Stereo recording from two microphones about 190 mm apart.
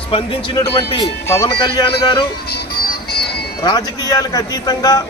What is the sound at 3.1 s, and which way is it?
Music, 55° left (ahead or behind).